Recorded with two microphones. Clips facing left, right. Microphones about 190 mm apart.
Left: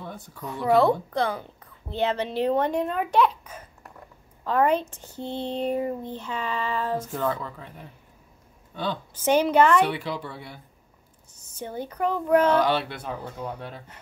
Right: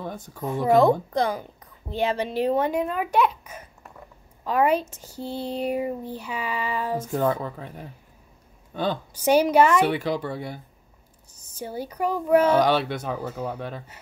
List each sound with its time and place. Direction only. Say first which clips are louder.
0.0 s speech: right 5 dB; 45° right (ahead or behind)
1.1 s a woman's voice: right 2 dB; 15° right (ahead or behind)
4.8 s speech: right 1 dB; 40° right (ahead or behind)
5.2 s a woman's voice: even; 10° right (ahead or behind)
7.1 s speech: right 4 dB; 45° right (ahead or behind)
9.2 s a woman's voice: right 2 dB; 10° right (ahead or behind)
9.9 s speech: right 6 dB; 45° right (ahead or behind)
11.5 s a woman's voice: right 1 dB; 10° right (ahead or behind)
12.5 s speech: right 3 dB; 40° right (ahead or behind)